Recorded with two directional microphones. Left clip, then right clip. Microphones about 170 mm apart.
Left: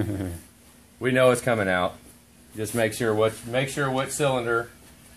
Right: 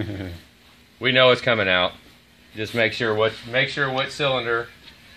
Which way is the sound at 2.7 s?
30° right (ahead or behind).